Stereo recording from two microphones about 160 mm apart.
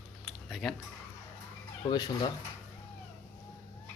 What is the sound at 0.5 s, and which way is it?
Speech, centre (ahead or behind).